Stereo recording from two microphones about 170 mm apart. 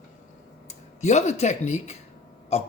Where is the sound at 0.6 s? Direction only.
45° left (ahead or behind).